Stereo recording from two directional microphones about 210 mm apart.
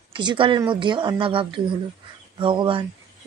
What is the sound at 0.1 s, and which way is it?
Speech, 20° right (ahead or behind).